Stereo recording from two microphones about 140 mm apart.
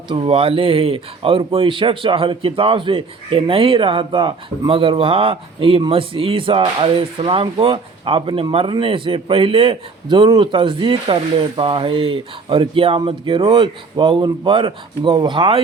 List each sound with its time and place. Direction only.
0.1 s speech: 40° right (ahead or behind)